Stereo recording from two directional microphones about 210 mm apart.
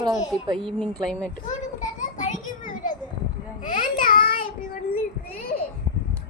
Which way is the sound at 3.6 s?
40° left (ahead or behind).